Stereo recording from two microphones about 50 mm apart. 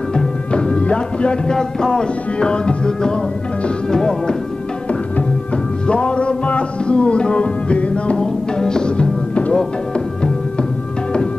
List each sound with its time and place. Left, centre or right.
0.1 s music: centre
5.9 s music: centre
9.6 s speech: centre